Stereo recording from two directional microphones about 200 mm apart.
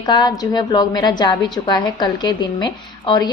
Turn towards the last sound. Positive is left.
turn(degrees=20)  # may be behind; listen again after turning